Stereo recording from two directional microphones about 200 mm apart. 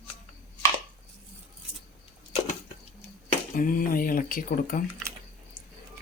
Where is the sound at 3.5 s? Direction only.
45° left (ahead or behind).